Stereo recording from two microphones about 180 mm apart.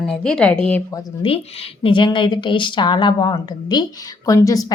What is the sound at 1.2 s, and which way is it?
A woman's voice, 30° left (ahead or behind).